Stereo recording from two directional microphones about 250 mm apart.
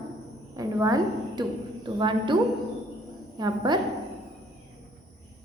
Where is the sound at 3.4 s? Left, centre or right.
Centre.